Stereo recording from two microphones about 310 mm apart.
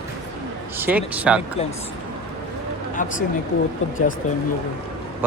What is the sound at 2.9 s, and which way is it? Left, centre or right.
Speech, left.